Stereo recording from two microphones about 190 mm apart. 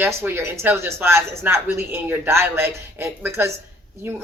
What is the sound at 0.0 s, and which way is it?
Speech, 10° right (ahead or behind).